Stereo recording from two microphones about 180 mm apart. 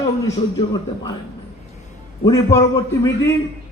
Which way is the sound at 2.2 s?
20° left (ahead or behind).